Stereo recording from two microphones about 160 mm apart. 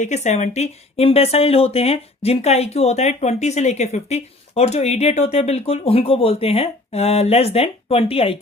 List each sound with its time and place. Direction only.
0.0 s speech: 45° left (ahead or behind)